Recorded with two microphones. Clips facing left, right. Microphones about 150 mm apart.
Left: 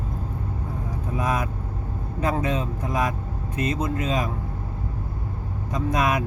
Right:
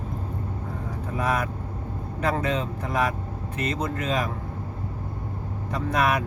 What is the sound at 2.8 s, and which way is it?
A man's voice, 20° left (ahead or behind).